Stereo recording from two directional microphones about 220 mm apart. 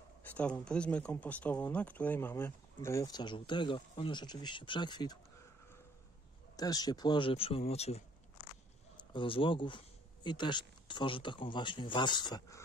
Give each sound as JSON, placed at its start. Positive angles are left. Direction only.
{"t": 0.2, "sound": "speech", "side_deg": 5}
{"t": 6.5, "sound": "speech", "side_deg": 15}
{"t": 9.1, "sound": "speech", "side_deg": 25}